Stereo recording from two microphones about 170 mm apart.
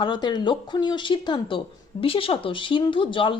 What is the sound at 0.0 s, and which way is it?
Speech, 25° left (ahead or behind).